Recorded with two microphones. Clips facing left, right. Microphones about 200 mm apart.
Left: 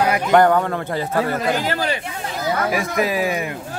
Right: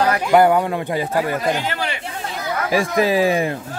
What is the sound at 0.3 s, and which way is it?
A man's voice, 10° right (ahead or behind).